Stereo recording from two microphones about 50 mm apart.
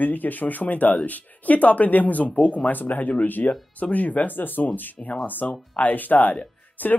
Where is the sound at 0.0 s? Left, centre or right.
Left.